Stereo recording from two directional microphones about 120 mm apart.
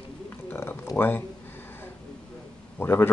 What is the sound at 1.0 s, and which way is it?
Speech, 20° left (ahead or behind).